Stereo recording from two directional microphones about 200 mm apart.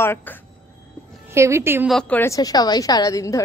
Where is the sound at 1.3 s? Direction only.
15° right (ahead or behind).